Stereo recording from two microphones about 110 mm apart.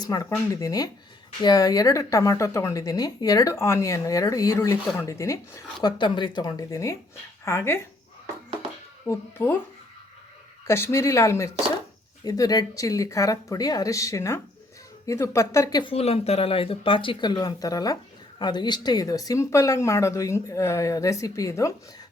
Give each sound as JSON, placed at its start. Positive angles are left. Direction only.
{"t": 0.0, "sound": "speech", "side_deg": 35}
{"t": 5.8, "sound": "speech", "side_deg": 45}
{"t": 9.0, "sound": "speech", "side_deg": 20}
{"t": 10.7, "sound": "speech", "side_deg": 25}
{"t": 15.8, "sound": "speech", "side_deg": 60}